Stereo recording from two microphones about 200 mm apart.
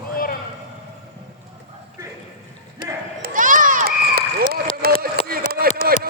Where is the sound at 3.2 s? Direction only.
45° right (ahead or behind).